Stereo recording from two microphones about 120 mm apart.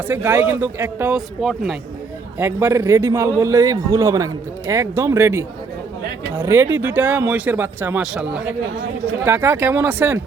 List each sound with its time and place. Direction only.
0.1 s speech: 15° right (ahead or behind)
1.1 s speech: centre (ahead or behind)
2.4 s a man's voice: 20° right (ahead or behind)
9.2 s speech: 20° right (ahead or behind)